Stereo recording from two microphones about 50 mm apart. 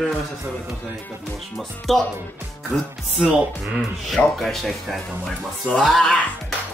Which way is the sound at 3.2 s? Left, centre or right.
Centre.